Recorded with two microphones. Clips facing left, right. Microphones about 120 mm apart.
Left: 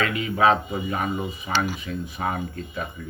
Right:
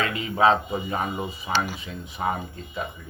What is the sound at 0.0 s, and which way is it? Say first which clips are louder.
Speech: even; 30° right (ahead or behind).